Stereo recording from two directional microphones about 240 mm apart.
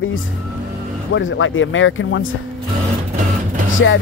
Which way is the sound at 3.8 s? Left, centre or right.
Left.